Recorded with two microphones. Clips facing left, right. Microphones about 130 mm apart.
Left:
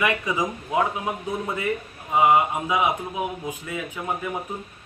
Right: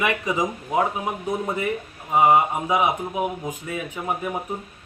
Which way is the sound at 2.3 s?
25° right (ahead or behind).